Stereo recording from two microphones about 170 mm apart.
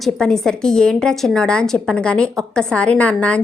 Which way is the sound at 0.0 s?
5° left (ahead or behind).